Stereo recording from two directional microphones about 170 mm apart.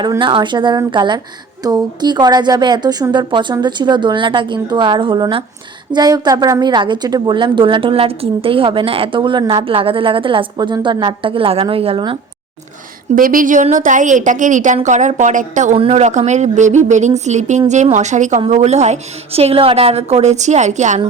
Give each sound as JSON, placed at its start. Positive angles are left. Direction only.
{"t": 0.0, "sound": "a woman's voice", "side_deg": -25}
{"t": 13.1, "sound": "a woman's voice", "side_deg": -55}